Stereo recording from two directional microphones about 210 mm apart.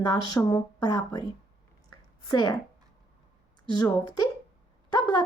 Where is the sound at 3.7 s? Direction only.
20° left (ahead or behind).